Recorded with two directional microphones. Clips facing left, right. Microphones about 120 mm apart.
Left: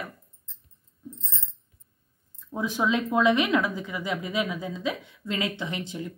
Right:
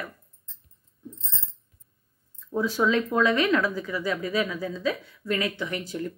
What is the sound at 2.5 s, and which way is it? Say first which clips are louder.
Speech: right 2 dB; 15° left (ahead or behind).